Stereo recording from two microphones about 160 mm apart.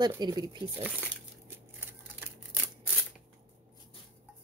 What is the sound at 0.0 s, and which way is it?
Speech, 25° right (ahead or behind).